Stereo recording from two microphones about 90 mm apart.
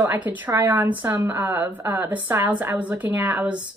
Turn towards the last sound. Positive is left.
turn(degrees=-15)  # may be behind; listen again after turning